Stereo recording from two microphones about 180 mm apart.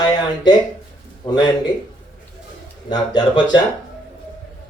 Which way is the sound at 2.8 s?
25° left (ahead or behind).